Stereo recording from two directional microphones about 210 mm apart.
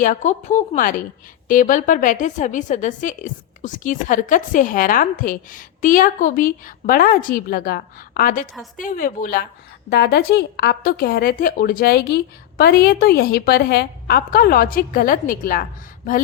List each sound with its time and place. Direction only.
0.0 s a woman's voice: 35° left (ahead or behind)